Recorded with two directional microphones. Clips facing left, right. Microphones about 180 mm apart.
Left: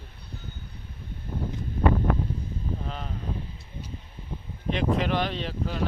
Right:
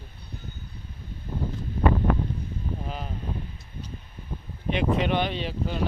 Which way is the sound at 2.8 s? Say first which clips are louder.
Right 1 dB; 5° right (ahead or behind).